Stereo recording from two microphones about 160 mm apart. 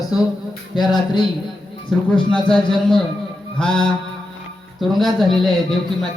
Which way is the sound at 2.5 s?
5° left (ahead or behind).